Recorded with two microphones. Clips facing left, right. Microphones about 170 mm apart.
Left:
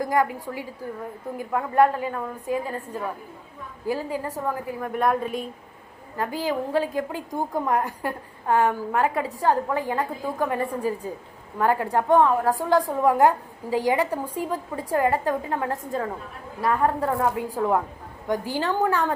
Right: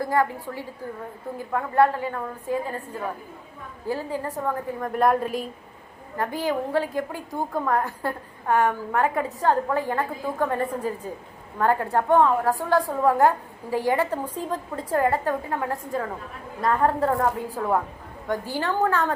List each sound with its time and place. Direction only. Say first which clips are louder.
0.0 s a woman's voice: even; 15° left (ahead or behind)
4.9 s speech: right 2 dB; centre (ahead or behind)
6.1 s a woman's voice: even; 15° left (ahead or behind)
16.6 s a woman's voice: right 1 dB; 10° left (ahead or behind)